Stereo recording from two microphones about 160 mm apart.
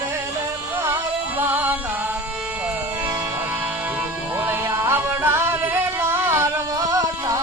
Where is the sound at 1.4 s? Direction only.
10° right (ahead or behind).